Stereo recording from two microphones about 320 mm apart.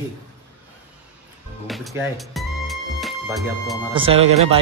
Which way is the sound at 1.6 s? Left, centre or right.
Centre.